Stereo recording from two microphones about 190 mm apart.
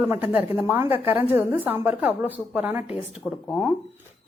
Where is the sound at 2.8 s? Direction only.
30° left (ahead or behind).